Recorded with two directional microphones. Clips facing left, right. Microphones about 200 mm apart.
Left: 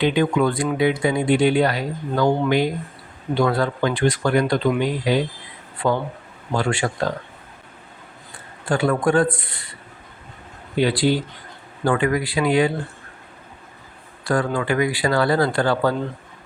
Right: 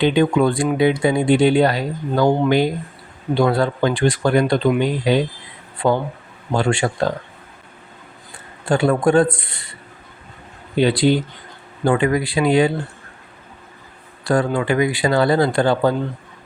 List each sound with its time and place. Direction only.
0.0 s speech: 25° right (ahead or behind)
3.3 s speech: 30° right (ahead or behind)
6.5 s speech: 25° right (ahead or behind)
8.7 s speech: 25° right (ahead or behind)
10.8 s speech: 25° right (ahead or behind)
14.3 s speech: 25° right (ahead or behind)